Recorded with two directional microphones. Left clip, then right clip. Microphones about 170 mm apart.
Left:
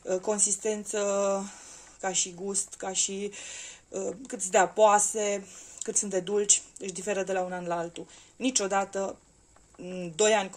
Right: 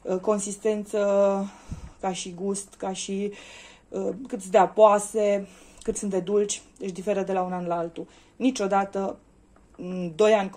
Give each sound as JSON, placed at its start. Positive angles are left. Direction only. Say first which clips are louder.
{"t": 0.0, "sound": "speech", "louder": "right 3 dB", "side_deg": 0}